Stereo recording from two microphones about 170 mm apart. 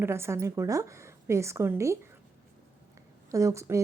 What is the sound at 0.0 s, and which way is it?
A woman's voice, 15° right (ahead or behind).